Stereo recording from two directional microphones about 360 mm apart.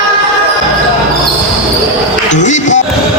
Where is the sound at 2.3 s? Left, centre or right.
Centre.